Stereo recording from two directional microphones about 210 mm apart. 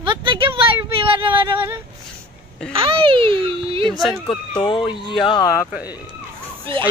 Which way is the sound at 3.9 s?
Centre (ahead or behind).